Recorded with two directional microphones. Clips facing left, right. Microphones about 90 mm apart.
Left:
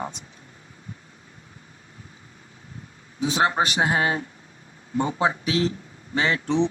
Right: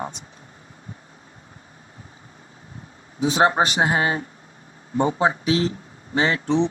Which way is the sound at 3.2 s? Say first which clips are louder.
Right 3 dB; 30° right (ahead or behind).